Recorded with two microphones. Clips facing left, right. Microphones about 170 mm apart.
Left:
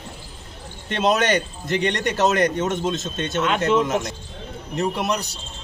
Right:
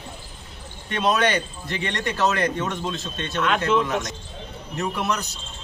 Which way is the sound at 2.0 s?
40° left (ahead or behind).